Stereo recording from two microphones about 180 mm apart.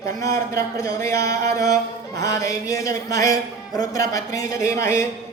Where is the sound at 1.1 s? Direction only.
60° right (ahead or behind).